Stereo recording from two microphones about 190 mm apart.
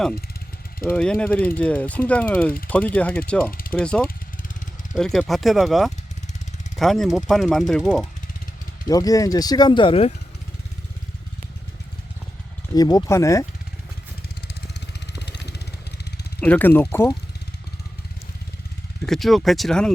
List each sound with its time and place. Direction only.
0.9 s speech: 5° left (ahead or behind)
8.9 s speech: 20° left (ahead or behind)
12.7 s speech: 20° left (ahead or behind)
15.3 s vehicle: 60° left (ahead or behind)
16.4 s speech: 10° left (ahead or behind)
19.0 s speech: centre (ahead or behind)